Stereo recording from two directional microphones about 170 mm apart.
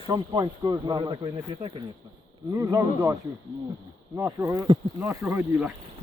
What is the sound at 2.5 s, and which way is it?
Speech, 15° right (ahead or behind).